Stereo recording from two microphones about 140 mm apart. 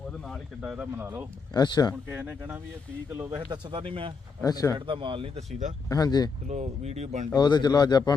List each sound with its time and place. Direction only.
0.6 s speech: 10° right (ahead or behind)
1.5 s speech: 30° left (ahead or behind)
2.0 s speech: 10° right (ahead or behind)
3.1 s speech: 25° right (ahead or behind); by 4.1 s 40° right (ahead or behind)
4.4 s speech: 25° left (ahead or behind)
4.9 s speech: 35° right (ahead or behind)
5.9 s speech: 30° left (ahead or behind)
6.5 s speech: 55° right (ahead or behind)
7.3 s speech: 30° left (ahead or behind)